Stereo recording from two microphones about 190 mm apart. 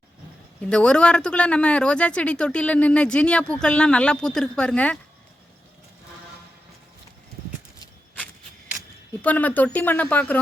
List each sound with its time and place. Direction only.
0.7 s speech: 5° left (ahead or behind)
9.2 s speech: 10° left (ahead or behind)